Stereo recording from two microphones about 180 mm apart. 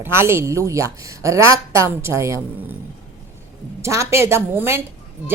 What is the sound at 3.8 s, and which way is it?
A woman's voice, 15° right (ahead or behind).